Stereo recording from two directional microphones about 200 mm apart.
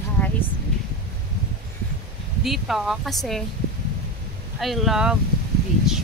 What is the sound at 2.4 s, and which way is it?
Speech, centre (ahead or behind).